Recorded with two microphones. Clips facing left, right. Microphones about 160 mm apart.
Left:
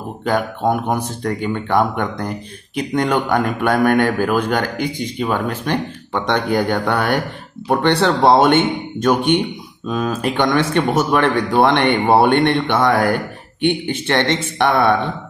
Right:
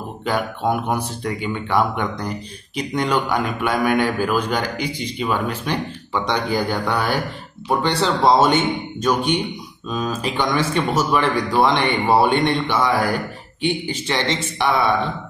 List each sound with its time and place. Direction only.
0.2 s speech: 50° left (ahead or behind)